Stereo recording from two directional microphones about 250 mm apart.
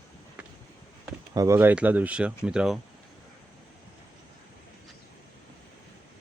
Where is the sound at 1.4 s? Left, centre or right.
Centre.